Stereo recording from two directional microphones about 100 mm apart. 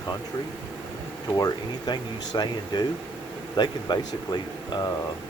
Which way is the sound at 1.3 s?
40° left (ahead or behind).